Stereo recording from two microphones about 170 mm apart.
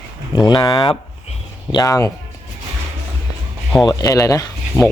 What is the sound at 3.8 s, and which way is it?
Speech, 20° left (ahead or behind).